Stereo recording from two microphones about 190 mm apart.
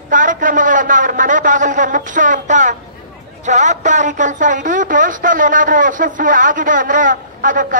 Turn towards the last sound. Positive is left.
turn(degrees=-45)  # may be behind; listen again after turning